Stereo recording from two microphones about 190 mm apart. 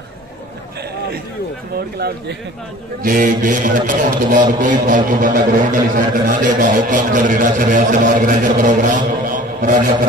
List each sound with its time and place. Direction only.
2.0 s speech: 55° right (ahead or behind)